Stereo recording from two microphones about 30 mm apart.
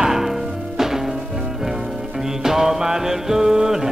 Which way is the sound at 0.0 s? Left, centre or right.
Centre.